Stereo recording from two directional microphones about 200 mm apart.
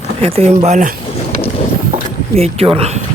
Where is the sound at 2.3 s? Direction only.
30° right (ahead or behind).